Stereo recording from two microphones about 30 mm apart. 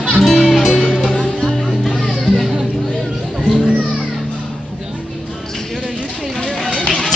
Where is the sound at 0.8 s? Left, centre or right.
Centre.